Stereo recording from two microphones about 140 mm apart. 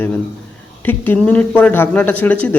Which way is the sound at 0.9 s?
10° left (ahead or behind).